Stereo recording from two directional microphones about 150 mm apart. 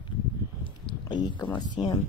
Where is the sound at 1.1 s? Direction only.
30° left (ahead or behind).